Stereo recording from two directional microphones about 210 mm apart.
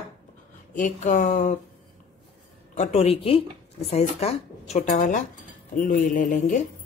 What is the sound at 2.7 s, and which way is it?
A woman's voice, 30° left (ahead or behind).